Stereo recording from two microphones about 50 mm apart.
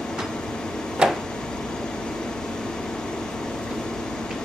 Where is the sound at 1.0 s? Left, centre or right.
Centre.